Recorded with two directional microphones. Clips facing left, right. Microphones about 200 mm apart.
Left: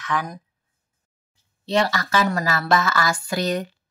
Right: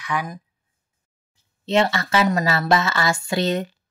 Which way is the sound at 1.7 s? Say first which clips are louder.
Right 2 dB; 25° right (ahead or behind).